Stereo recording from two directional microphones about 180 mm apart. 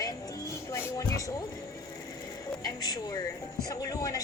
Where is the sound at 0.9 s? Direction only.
20° left (ahead or behind).